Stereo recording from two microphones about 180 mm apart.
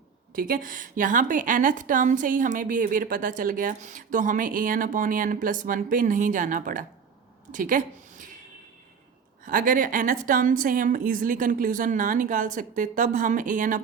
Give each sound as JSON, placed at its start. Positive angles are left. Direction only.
{"t": 0.3, "sound": "a woman's voice", "side_deg": -55}
{"t": 7.5, "sound": "a sound", "side_deg": -45}
{"t": 9.4, "sound": "a woman's voice", "side_deg": -50}